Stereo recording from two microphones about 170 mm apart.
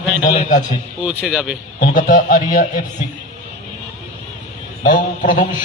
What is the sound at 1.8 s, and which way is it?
Speech, 50° left (ahead or behind).